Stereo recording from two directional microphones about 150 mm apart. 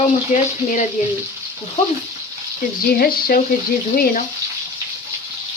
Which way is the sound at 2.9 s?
80° left.